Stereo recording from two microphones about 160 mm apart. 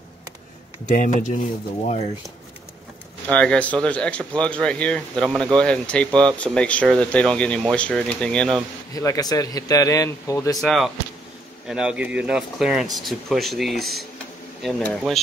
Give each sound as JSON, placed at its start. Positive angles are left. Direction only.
{"t": 0.8, "sound": "speech", "side_deg": 55}
{"t": 3.3, "sound": "speech", "side_deg": 5}
{"t": 8.9, "sound": "speech", "side_deg": 20}
{"t": 10.6, "sound": "speech", "side_deg": 0}